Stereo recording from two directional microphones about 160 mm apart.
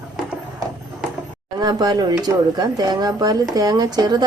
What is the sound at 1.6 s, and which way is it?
Speech, 25° right (ahead or behind).